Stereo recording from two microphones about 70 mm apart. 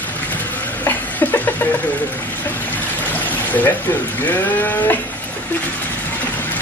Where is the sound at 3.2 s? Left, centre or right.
Left.